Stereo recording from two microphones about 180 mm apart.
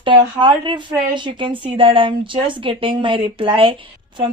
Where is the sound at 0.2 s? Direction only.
25° right (ahead or behind).